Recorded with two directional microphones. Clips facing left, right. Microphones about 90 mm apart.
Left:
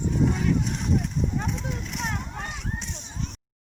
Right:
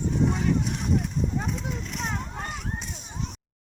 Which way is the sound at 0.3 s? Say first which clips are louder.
Even; 5° right (ahead or behind).